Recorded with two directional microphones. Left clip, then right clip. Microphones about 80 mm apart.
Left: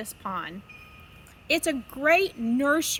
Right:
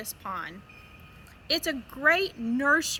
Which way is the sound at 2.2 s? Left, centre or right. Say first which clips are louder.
Left 1 dB; left.